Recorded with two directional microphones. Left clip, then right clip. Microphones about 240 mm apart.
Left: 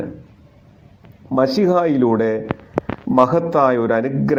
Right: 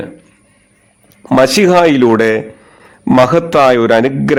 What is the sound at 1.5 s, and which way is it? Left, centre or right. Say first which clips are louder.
A man's voice: right 8 dB; right.